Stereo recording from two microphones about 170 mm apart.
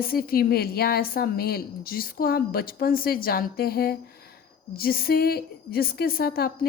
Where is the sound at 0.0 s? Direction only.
60° left (ahead or behind).